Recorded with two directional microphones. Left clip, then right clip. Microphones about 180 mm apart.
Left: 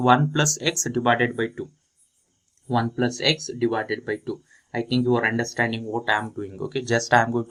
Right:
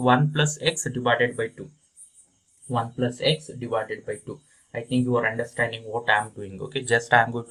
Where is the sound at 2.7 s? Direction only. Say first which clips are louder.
Left 2 dB; 50° left (ahead or behind); by 7.4 s 30° left (ahead or behind).